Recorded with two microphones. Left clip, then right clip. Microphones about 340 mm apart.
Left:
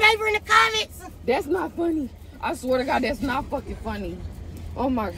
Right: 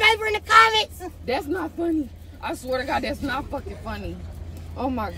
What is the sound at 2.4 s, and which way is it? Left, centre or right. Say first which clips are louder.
Speech: left 3 dB; centre.